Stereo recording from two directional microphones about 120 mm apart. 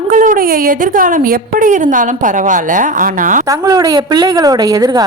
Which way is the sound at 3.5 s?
30° right (ahead or behind).